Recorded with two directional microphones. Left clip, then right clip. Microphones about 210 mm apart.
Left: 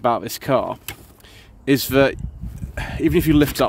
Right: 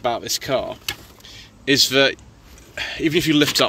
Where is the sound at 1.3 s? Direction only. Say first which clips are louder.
Even; 40° left (ahead or behind).